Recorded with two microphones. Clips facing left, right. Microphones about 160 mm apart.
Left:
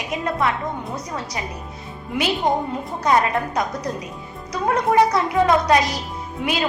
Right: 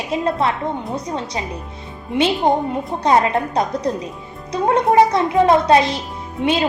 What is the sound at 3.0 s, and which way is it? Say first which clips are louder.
A woman's voice: right 3 dB; 30° right (ahead or behind).